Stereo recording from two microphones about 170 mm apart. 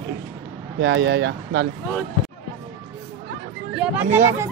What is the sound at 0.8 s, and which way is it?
Speech, 90° right.